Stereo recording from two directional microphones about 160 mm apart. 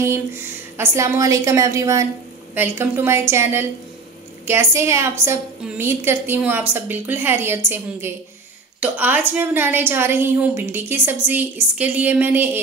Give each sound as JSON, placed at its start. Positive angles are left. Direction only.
{"t": 0.0, "sound": "a woman's voice", "side_deg": -15}